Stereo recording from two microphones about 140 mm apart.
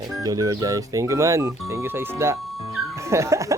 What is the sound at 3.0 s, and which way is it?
Music, 20° right (ahead or behind).